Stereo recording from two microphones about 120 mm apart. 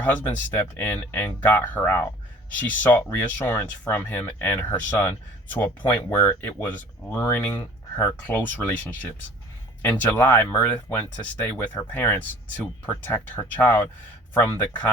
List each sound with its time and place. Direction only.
0.4 s speech: 15° left (ahead or behind)